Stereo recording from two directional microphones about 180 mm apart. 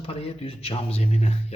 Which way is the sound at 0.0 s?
30° left (ahead or behind).